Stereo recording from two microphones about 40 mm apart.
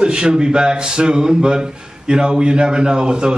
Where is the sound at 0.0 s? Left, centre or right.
Right.